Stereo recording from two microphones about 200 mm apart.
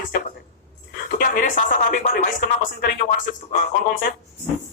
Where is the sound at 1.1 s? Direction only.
45° left (ahead or behind).